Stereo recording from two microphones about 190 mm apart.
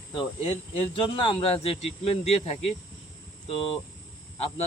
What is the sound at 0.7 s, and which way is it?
Speech, 25° left (ahead or behind).